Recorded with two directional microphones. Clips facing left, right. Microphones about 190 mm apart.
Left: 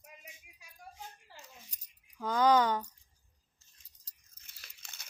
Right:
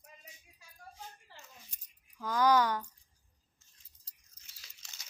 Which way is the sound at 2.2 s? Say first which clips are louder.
Left 1 dB; 25° left (ahead or behind).